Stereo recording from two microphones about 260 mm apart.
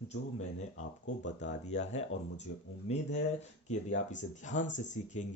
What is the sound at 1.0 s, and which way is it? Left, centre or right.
Speech, left.